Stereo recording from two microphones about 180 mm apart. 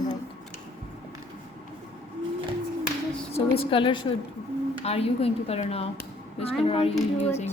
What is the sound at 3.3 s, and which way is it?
A woman's voice, 30° left (ahead or behind).